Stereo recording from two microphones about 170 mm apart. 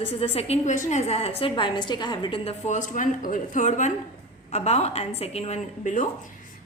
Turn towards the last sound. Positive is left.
turn(degrees=45)  # may be behind; listen again after turning